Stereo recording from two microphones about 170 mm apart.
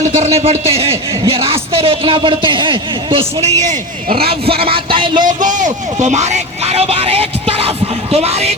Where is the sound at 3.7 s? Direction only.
60° right (ahead or behind).